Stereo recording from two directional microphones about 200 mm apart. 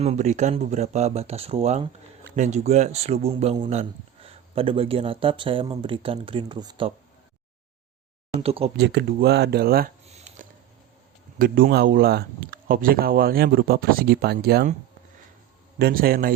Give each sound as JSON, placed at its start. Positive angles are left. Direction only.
{"t": 0.0, "sound": "a man's voice", "side_deg": -35}
{"t": 8.4, "sound": "a man's voice", "side_deg": -30}
{"t": 8.7, "sound": "speech", "side_deg": -55}
{"t": 10.2, "sound": "dishes", "side_deg": -35}
{"t": 11.3, "sound": "speech", "side_deg": -45}
{"t": 15.8, "sound": "speech", "side_deg": -50}